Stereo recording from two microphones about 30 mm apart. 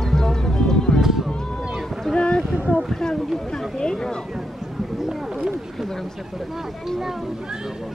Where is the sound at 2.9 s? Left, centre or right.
Left.